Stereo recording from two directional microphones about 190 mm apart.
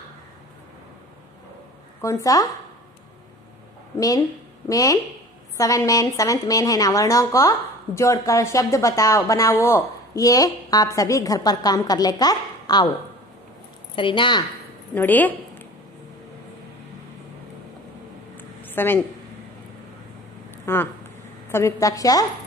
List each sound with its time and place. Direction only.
2.0 s a woman's voice: 15° left (ahead or behind)
4.6 s a woman's voice: 20° left (ahead or behind)
13.9 s a woman's voice: 25° left (ahead or behind)
15.0 s a woman's voice: 10° left (ahead or behind)
18.4 s a sound: 10° left (ahead or behind)
20.5 s a woman's voice: 10° left (ahead or behind)